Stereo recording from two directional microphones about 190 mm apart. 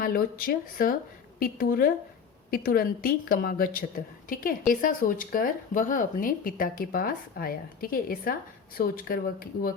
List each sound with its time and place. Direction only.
0.0 s speech: 50° left (ahead or behind)